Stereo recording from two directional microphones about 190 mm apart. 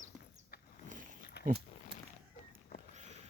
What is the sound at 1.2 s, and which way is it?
Wild animals, 60° left (ahead or behind).